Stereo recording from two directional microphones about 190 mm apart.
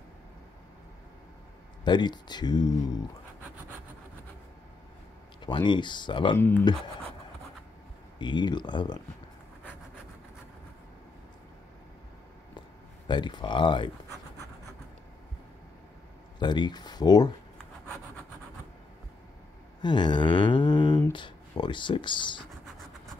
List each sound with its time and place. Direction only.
1.9 s speech: 25° left (ahead or behind)
5.4 s speech: 25° left (ahead or behind)
6.3 s speech: 10° left (ahead or behind)
8.2 s speech: 25° left (ahead or behind)
13.0 s speech: 25° left (ahead or behind)
16.3 s speech: 25° left (ahead or behind)
19.8 s a sound: 25° left (ahead or behind)